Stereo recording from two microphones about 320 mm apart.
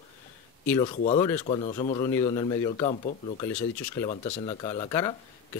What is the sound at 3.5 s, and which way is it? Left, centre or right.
A man's voice, centre.